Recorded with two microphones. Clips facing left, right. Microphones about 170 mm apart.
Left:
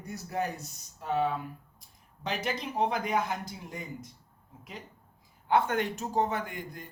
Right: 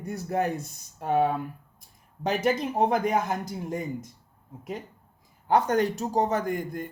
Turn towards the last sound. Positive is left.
turn(degrees=-50)  # may be behind; listen again after turning